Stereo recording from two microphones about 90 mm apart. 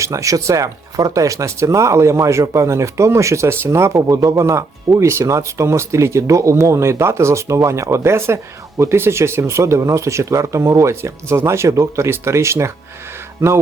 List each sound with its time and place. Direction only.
0.0 s speech: 35° right (ahead or behind)
13.4 s music: 25° right (ahead or behind)